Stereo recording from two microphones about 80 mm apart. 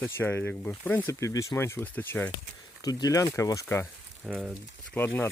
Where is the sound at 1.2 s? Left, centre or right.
Left.